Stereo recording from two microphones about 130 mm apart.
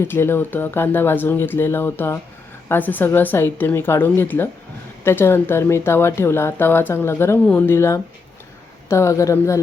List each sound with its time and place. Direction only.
0.0 s speech: 20° left (ahead or behind)